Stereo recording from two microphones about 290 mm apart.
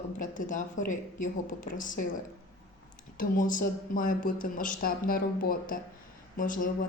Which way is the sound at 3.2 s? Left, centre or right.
Left.